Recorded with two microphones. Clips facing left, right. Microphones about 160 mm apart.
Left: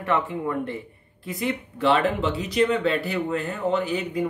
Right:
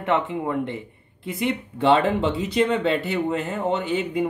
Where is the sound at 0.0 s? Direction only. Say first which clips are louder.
Right 2 dB; 20° right (ahead or behind).